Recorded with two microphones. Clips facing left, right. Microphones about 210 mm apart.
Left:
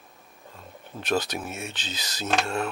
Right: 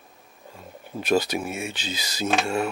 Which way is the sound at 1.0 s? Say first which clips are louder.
Right 4 dB; 10° right (ahead or behind).